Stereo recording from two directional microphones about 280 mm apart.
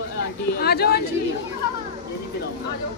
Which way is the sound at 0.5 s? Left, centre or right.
Left.